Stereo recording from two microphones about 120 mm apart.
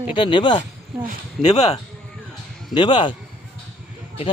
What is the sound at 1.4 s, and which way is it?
Speech, 70° left (ahead or behind).